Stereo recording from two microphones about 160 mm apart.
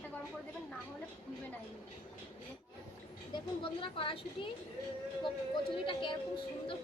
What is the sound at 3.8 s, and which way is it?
Speech, 30° left (ahead or behind).